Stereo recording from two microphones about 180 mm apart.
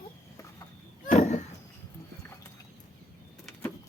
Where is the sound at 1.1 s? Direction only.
40° left (ahead or behind).